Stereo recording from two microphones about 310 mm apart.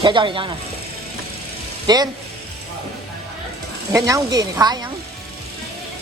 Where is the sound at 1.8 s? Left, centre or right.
Centre.